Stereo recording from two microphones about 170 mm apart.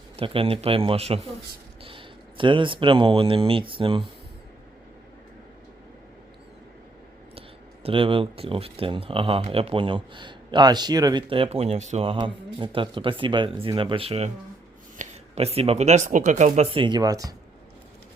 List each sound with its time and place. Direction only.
0.2 s speech: 35° right (ahead or behind)
7.3 s speech: 35° right (ahead or behind)